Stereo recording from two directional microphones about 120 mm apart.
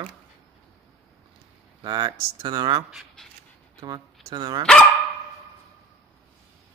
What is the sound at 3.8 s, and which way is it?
Speech, 35° right (ahead or behind).